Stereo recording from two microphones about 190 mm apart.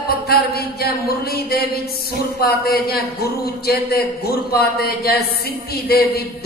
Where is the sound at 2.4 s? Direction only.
55° left (ahead or behind).